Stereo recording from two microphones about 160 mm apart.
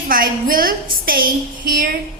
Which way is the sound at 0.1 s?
60° right (ahead or behind).